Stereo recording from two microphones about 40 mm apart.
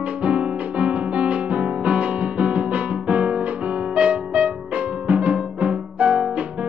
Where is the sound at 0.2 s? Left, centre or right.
Right.